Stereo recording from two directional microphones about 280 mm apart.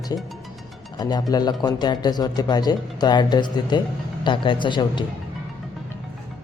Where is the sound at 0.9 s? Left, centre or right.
Centre.